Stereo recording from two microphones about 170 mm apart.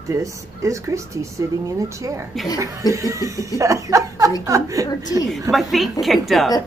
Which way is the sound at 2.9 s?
20° right (ahead or behind).